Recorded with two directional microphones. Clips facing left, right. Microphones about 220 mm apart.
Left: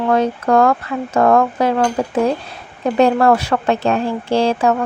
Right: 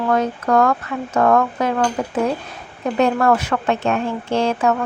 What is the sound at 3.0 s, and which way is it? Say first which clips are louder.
Speech: left 3 dB; 35° left (ahead or behind).